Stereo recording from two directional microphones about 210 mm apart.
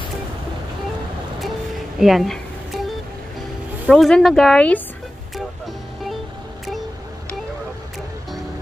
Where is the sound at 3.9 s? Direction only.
Centre (ahead or behind).